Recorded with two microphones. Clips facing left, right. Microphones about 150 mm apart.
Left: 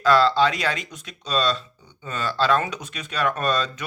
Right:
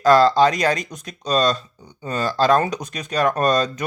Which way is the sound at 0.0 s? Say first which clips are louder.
Right 4 dB; 40° right (ahead or behind).